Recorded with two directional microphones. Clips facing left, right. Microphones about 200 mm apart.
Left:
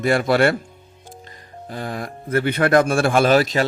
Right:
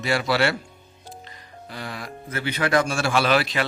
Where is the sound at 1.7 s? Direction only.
45° left (ahead or behind).